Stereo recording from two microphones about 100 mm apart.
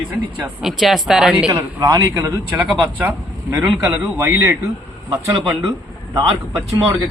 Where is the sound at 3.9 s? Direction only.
20° right (ahead or behind).